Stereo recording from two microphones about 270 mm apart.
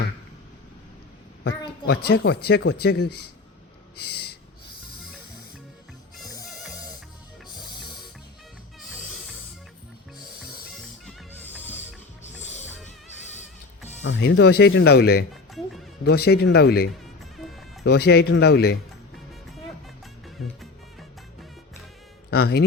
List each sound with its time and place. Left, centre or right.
2.0 s speech: left
4.0 s snort: left
8.8 s music: centre
10.4 s music: centre
12.4 s music: left
14.0 s speech: left
15.5 s music: centre
16.0 s speech: left
17.3 s music: centre
17.8 s speech: left
19.1 s music: centre
22.3 s speech: left